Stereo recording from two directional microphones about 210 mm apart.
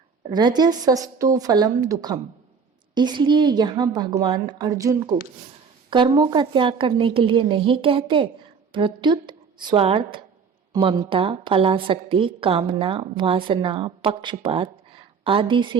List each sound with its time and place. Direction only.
0.3 s a woman's voice: 20° right (ahead or behind)